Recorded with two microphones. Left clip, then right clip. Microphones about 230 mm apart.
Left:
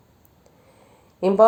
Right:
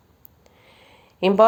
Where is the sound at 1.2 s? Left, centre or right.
Right.